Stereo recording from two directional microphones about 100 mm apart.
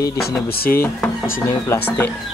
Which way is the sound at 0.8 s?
25° left (ahead or behind).